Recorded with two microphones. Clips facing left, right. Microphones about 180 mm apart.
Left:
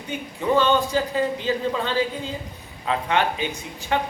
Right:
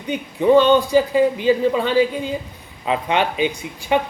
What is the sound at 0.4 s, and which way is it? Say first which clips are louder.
A man's voice: right 7 dB; 20° right (ahead or behind).